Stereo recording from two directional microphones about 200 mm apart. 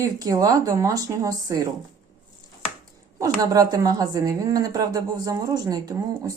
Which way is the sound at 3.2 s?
20° right (ahead or behind).